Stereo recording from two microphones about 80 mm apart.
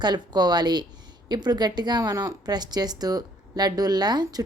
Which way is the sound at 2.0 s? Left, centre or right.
Right.